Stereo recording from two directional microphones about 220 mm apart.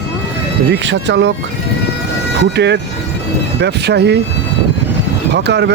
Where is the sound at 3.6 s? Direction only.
50° right (ahead or behind).